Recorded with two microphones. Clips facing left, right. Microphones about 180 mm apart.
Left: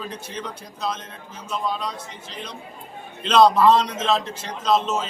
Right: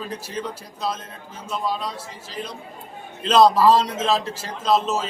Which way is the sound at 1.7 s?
5° right (ahead or behind).